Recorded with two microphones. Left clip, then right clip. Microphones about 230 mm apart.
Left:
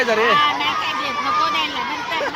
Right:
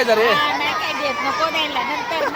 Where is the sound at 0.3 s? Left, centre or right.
Left.